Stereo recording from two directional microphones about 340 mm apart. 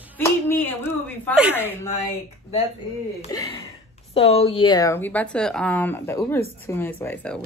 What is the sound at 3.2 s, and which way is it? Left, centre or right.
Speech, centre.